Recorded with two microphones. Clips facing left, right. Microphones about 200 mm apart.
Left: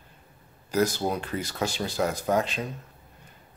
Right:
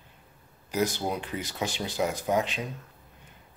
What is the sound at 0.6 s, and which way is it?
Speech, 15° right (ahead or behind).